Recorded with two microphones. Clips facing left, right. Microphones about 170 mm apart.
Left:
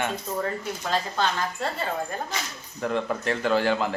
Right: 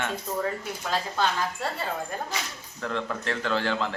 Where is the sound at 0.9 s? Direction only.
10° right (ahead or behind).